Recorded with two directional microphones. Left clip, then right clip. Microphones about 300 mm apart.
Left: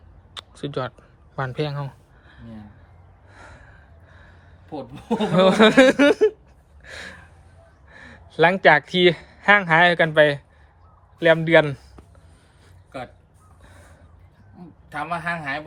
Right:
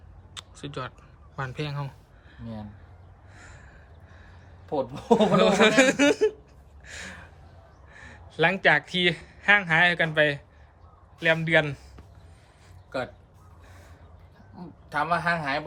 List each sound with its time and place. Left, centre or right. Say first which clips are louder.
0.3 s a sound: left 8 dB; centre
4.7 s speech: right 6 dB; centre
5.2 s speech: left 6 dB; centre
6.8 s a sound: left 3 dB; centre
7.9 s speech: left 3 dB; centre
14.8 s speech: right 2 dB; centre